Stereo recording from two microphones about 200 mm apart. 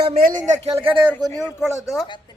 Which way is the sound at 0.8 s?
10° right (ahead or behind).